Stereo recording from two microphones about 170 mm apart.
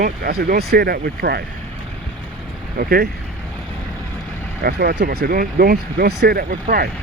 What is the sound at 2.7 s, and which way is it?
Speech, 60° right (ahead or behind).